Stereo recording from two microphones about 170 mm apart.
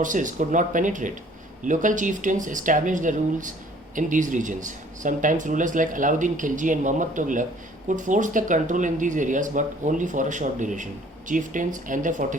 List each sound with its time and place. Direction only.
0.0 s speech: 50° right (ahead or behind)